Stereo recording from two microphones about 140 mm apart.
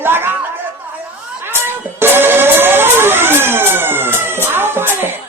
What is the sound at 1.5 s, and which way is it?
Music, 15° right (ahead or behind).